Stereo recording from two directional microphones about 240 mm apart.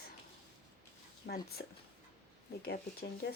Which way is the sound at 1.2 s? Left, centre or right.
Left.